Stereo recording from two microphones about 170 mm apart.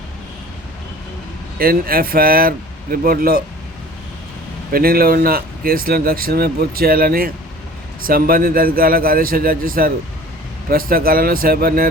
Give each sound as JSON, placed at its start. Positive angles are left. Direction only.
{"t": 1.5, "sound": "speech", "side_deg": -60}
{"t": 4.7, "sound": "speech", "side_deg": -60}